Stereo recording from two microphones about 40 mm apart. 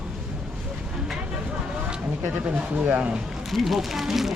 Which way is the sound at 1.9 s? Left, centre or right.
Right.